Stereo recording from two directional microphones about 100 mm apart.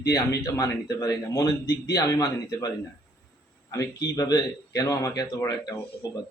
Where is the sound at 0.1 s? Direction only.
35° left (ahead or behind).